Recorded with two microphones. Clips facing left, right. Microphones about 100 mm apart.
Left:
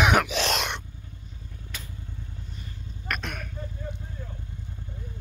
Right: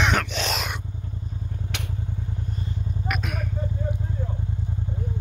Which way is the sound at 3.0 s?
5° right (ahead or behind).